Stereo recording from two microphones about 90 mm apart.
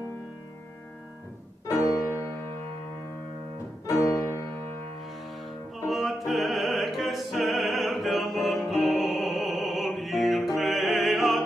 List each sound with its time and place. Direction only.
2.0 s music: 30° left (ahead or behind)
3.8 s music: 30° left (ahead or behind)
5.9 s music: centre (ahead or behind)